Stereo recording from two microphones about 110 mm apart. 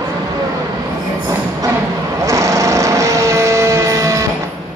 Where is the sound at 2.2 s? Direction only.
30° right (ahead or behind).